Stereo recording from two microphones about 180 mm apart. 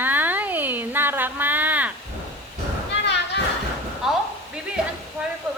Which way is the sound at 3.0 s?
75° left (ahead or behind).